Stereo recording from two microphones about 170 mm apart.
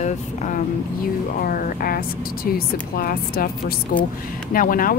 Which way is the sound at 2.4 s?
60° left (ahead or behind).